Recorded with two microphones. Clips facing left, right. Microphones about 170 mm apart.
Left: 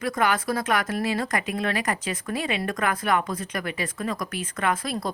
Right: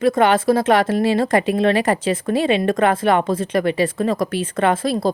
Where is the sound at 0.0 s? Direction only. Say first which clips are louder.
Right 9 dB; 25° right (ahead or behind).